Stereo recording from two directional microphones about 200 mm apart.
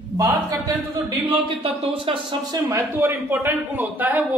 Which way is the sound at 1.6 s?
30° right (ahead or behind).